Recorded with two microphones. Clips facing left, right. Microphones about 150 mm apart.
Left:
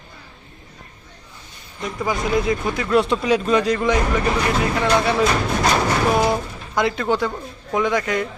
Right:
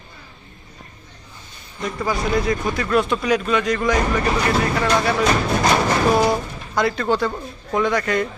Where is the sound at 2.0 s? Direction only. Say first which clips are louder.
Left 1 dB; 20° left (ahead or behind).